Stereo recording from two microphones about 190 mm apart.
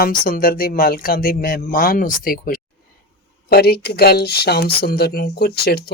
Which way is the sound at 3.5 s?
55° left (ahead or behind).